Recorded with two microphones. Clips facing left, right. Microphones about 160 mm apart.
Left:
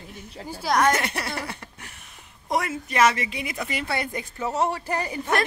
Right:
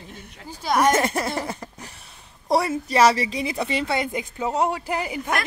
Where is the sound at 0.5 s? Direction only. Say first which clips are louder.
Even; 5° left (ahead or behind).